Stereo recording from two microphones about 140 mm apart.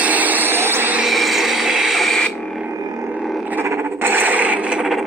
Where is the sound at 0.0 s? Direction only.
10° right (ahead or behind).